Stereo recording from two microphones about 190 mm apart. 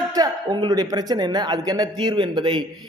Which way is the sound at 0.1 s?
20° right (ahead or behind).